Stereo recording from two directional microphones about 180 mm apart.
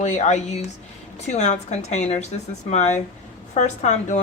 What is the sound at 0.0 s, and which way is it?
Speech, 40° left (ahead or behind).